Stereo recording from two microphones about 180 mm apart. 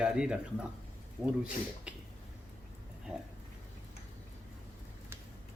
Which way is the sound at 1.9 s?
5° right (ahead or behind).